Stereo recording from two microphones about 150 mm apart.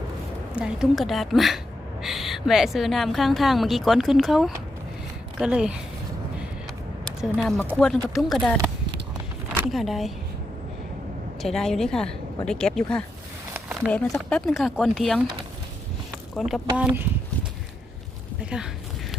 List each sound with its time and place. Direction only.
0.5 s speech: 5° right (ahead or behind)
7.2 s speech: centre (ahead or behind)
9.7 s speech: centre (ahead or behind)
11.4 s speech: 5° left (ahead or behind)
13.5 s a sound: 10° right (ahead or behind)
13.9 s speech: 10° left (ahead or behind)
16.3 s speech: centre (ahead or behind)